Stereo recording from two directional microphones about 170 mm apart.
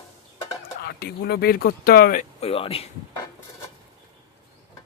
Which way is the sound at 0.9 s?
70° left (ahead or behind).